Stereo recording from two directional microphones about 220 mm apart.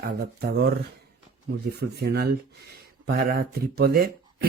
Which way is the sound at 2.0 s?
45° right (ahead or behind).